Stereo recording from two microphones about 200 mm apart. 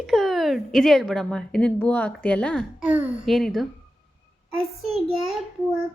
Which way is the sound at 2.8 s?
5° right (ahead or behind).